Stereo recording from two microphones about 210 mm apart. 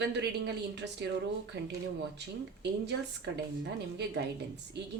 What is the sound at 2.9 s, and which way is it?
Speech, 55° right (ahead or behind).